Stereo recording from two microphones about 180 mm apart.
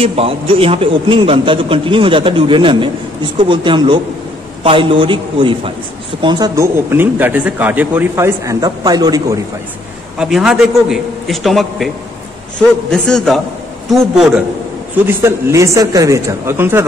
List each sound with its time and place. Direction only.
0.0 s a man's voice: 35° right (ahead or behind)
10.1 s a man's voice: 5° right (ahead or behind)
12.9 s a man's voice: 5° left (ahead or behind)
15.0 s speech: 15° right (ahead or behind)